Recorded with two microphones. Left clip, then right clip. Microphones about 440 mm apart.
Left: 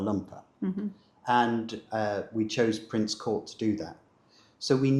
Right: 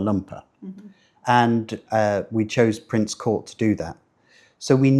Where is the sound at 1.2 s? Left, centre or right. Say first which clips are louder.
Right 7 dB; right.